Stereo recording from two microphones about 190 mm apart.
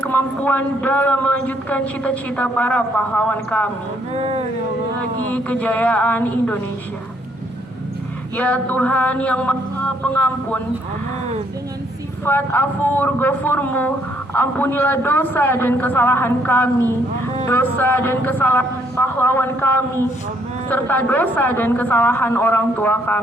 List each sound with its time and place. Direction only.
0.0 s a man's voice: 10° left (ahead or behind)
4.1 s speech: 35° right (ahead or behind)
5.2 s a man's voice: 5° left (ahead or behind)
8.4 s a man's voice: 5° left (ahead or behind)
12.2 s a man's voice: 10° left (ahead or behind)